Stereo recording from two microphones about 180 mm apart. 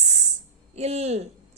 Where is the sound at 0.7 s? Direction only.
35° right (ahead or behind).